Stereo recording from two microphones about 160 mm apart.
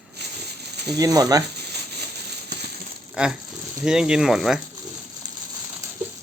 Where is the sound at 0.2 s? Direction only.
90° right.